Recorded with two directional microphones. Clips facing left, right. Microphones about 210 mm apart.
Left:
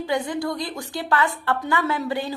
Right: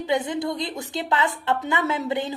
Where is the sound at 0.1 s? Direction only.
20° right (ahead or behind).